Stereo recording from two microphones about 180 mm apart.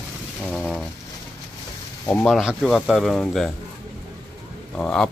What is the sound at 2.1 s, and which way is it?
Speech, 5° left (ahead or behind).